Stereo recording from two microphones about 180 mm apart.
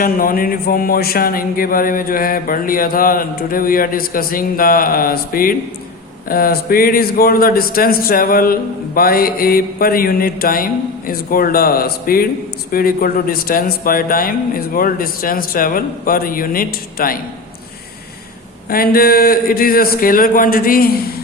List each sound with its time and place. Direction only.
0.0 s speech: 50° left (ahead or behind)
6.2 s mantra: 55° left (ahead or behind)
12.7 s speech: 55° left (ahead or behind)
18.7 s speech: 55° left (ahead or behind)